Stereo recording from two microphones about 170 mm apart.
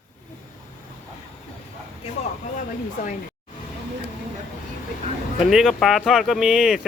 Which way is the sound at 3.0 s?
50° left (ahead or behind).